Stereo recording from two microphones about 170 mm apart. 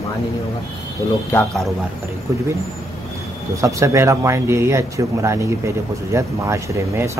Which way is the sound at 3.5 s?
20° right (ahead or behind).